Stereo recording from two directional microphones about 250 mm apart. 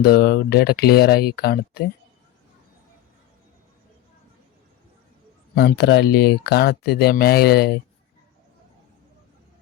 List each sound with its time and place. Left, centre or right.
0.0 s speech: left
5.5 s speech: left